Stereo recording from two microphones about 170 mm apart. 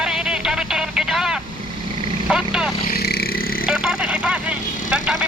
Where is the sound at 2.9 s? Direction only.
65° left (ahead or behind).